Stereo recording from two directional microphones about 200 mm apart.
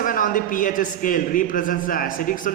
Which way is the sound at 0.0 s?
45° left (ahead or behind).